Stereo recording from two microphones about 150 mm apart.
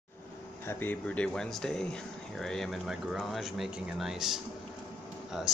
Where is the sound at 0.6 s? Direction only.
15° left (ahead or behind).